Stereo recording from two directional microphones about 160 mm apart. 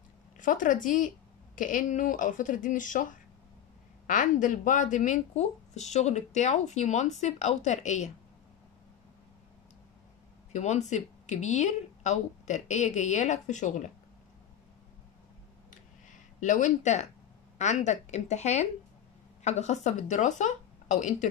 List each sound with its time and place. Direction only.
0.4 s speech: 55° left (ahead or behind)
10.5 s speech: 45° left (ahead or behind)
15.7 s a sound: 50° left (ahead or behind)
17.6 s speech: 45° left (ahead or behind)